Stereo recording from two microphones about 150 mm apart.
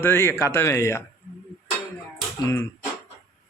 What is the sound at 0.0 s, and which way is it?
A man's voice, 15° left (ahead or behind).